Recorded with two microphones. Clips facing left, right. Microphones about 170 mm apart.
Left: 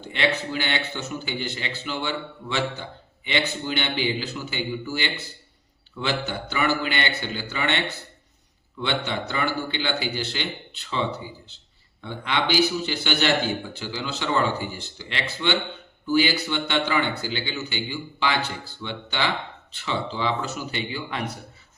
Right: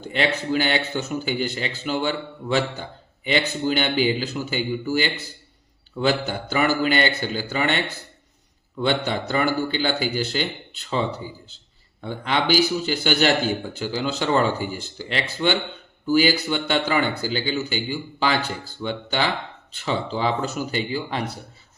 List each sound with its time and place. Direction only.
0.1 s a man's voice: 40° right (ahead or behind)
8.8 s a man's voice: 40° right (ahead or behind)
18.8 s a man's voice: 45° right (ahead or behind)